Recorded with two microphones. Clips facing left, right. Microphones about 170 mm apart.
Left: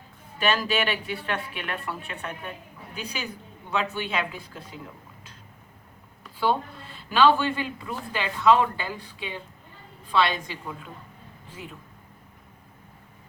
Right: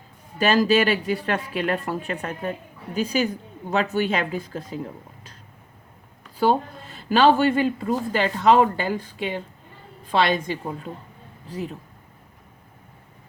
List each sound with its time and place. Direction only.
0.3 s a woman's voice: 40° right (ahead or behind)
6.4 s a woman's voice: 45° right (ahead or behind)